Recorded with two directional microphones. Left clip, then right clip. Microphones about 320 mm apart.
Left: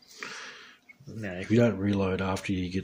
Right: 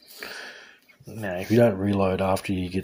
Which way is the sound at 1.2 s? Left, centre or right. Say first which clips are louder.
Right 5 dB; centre.